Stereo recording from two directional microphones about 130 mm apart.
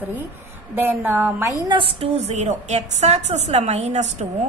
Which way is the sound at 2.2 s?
60° right (ahead or behind).